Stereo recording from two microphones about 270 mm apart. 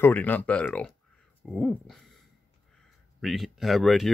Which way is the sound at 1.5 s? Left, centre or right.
Centre.